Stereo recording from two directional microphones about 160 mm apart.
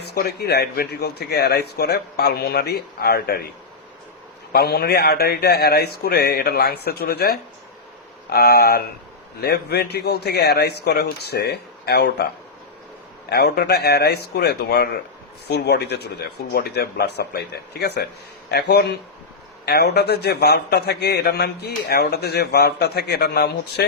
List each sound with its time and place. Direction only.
0.0 s speech: 85° left
4.5 s a man's voice: 80° left
8.3 s a man's voice: 85° left
13.3 s a man's voice: 85° left